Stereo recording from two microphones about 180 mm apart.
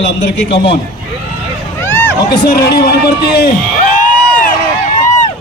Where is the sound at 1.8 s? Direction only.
15° left (ahead or behind).